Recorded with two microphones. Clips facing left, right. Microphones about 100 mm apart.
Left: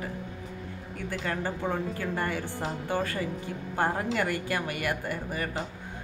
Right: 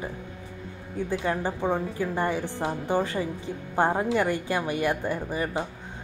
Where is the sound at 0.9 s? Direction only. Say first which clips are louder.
Right 5 dB; 20° right (ahead or behind).